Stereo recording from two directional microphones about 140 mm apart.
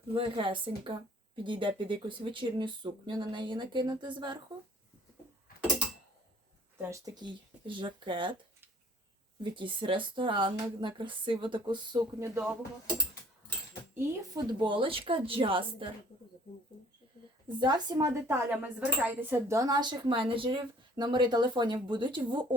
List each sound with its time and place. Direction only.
0.1 s speech: 40° right (ahead or behind)
6.8 s speech: 25° right (ahead or behind)
9.4 s speech: 35° right (ahead or behind)
12.2 s speech: 15° right (ahead or behind)
14.3 s speech: 35° right (ahead or behind)
17.6 s speech: 30° right (ahead or behind)
18.3 s speech: 15° right (ahead or behind); by 22.4 s 35° right (ahead or behind)